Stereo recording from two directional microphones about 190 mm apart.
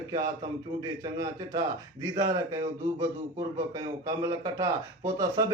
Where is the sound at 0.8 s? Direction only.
20° right (ahead or behind).